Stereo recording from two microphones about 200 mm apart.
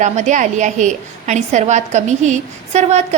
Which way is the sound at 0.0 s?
35° right (ahead or behind).